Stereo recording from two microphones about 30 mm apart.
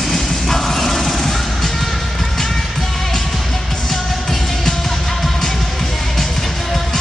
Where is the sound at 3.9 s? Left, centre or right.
Centre.